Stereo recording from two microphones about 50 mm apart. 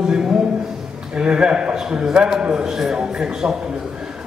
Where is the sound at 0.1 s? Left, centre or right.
Centre.